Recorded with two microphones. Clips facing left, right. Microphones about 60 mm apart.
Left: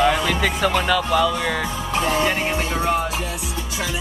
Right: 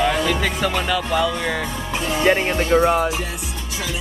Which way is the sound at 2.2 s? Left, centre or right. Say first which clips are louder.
Right 3 dB; right.